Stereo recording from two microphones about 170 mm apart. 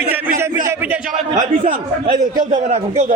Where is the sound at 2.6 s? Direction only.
40° right (ahead or behind).